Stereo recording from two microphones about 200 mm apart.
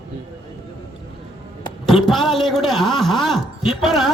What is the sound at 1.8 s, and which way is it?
A man's voice, centre (ahead or behind).